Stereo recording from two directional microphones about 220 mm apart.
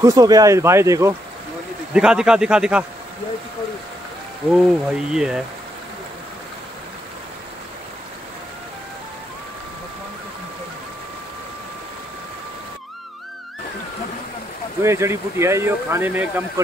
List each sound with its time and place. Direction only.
0.0 s speech: 15° right (ahead or behind)
2.0 s speech: 5° right (ahead or behind)
4.5 s speech: 5° right (ahead or behind)
14.8 s speech: 10° right (ahead or behind)